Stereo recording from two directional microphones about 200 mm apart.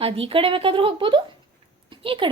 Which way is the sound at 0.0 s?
25° right (ahead or behind).